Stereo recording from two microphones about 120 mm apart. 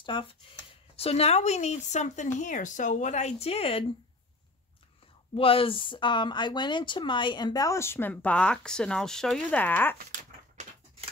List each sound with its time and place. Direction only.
0.0 s speech: 45° left (ahead or behind)
0.9 s speech: 55° left (ahead or behind); by 2.2 s 80° left
2.3 s speech: 90° left; by 3.8 s 55° left (ahead or behind)
5.3 s speech: 50° left (ahead or behind); by 9.9 s 15° left (ahead or behind)
10.1 s a sound: 75° right (ahead or behind)